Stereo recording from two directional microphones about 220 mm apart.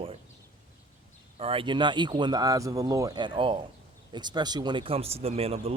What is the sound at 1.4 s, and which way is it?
Speech, 25° right (ahead or behind).